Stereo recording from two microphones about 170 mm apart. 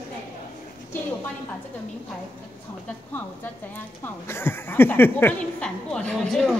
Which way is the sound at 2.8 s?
10° left (ahead or behind).